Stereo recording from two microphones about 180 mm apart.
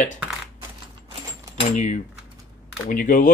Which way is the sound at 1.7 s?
40° left (ahead or behind).